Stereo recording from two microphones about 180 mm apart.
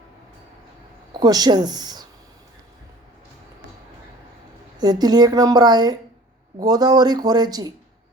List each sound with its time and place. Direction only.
1.1 s speech: 20° right (ahead or behind)
4.8 s a woman's voice: 20° right (ahead or behind)